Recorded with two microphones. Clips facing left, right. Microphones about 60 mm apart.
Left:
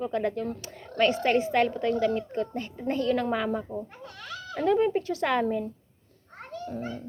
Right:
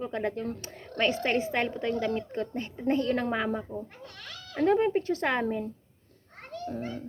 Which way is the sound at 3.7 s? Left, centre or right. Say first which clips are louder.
Left 2 dB; left.